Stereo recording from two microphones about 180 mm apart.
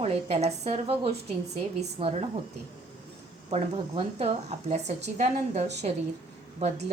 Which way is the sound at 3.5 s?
35° right (ahead or behind).